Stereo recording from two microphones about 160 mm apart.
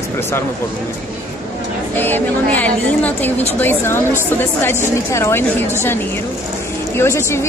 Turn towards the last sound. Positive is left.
turn(degrees=15)  # may be behind; listen again after turning